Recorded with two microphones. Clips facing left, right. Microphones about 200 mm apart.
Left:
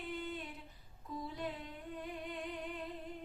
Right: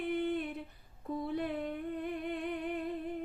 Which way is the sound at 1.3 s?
60° right (ahead or behind).